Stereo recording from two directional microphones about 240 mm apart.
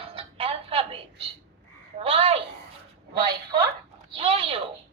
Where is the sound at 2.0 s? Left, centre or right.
Right.